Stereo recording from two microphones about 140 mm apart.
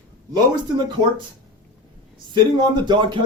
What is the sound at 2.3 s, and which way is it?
Speech, 30° right (ahead or behind).